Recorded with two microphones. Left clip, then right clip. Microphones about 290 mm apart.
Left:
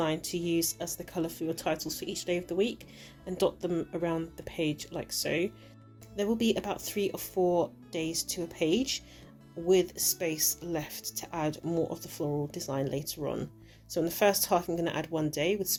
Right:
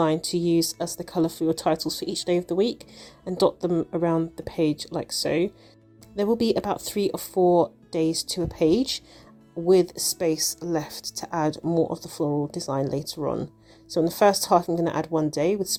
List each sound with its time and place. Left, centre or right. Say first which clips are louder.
0.0 s speech: right 8 dB; right